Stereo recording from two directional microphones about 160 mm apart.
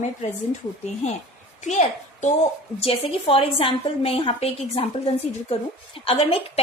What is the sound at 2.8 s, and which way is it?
A woman's voice, 35° left (ahead or behind).